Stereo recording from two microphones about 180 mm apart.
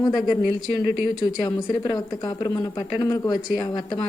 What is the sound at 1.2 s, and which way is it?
Speech, 20° left (ahead or behind).